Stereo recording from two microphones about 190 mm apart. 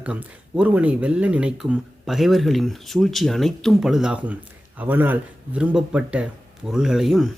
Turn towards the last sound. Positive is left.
turn(degrees=0)  # may be behind; listen again after turning